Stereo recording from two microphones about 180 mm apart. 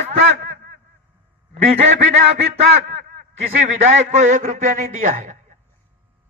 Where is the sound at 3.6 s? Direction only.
40° right (ahead or behind).